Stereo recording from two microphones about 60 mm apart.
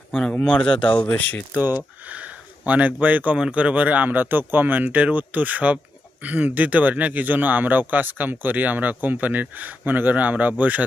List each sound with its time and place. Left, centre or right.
0.2 s speech: centre
1.1 s speech: left
1.6 s speech: right
3.3 s speech: centre